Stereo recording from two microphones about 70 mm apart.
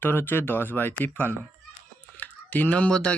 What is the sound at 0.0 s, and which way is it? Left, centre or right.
Speech, left.